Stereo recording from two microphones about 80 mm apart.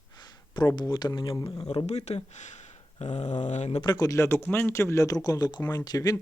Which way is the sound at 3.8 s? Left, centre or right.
Left.